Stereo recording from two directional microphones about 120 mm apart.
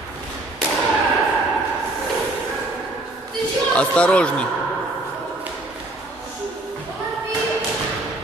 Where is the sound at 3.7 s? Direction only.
10° left (ahead or behind).